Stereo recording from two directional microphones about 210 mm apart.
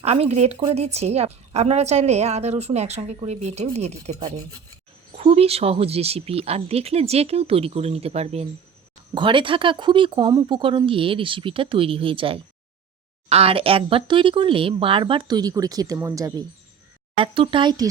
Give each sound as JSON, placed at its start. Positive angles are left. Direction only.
{"t": 0.0, "sound": "speech", "side_deg": -30}
{"t": 17.2, "sound": "speech", "side_deg": -25}